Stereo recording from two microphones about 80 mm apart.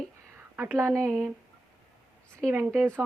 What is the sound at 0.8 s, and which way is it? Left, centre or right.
Speech, right.